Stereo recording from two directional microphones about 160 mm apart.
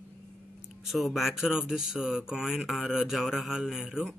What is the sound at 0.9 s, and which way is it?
Speech, centre (ahead or behind).